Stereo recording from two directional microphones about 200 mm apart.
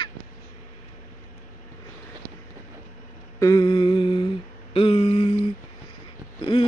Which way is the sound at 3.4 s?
20° left (ahead or behind).